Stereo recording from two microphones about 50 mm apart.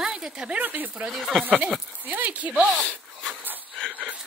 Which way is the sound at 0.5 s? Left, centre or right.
Right.